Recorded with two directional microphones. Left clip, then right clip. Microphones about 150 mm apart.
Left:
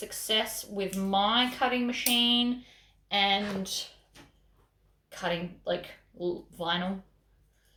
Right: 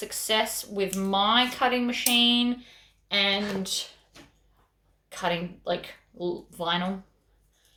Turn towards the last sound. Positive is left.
turn(degrees=-25)  # may be behind; listen again after turning